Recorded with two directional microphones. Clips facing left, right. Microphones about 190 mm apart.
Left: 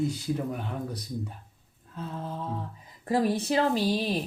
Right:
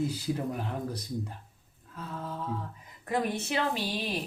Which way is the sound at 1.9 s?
25° left (ahead or behind).